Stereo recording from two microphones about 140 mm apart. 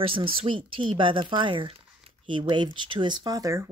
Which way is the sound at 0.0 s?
40° right (ahead or behind).